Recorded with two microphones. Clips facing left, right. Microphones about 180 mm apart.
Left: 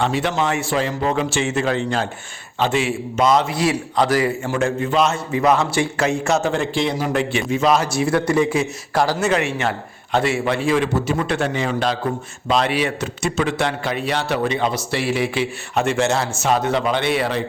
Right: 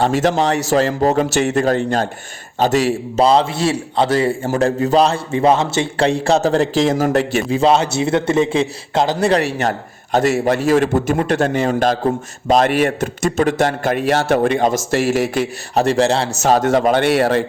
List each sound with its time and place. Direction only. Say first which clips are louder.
0.0 s a man's voice: right 5 dB; 40° right (ahead or behind)
4.4 s a man's voice: right 4 dB; 40° right (ahead or behind)
9.2 s a man's voice: right 4 dB; 35° right (ahead or behind)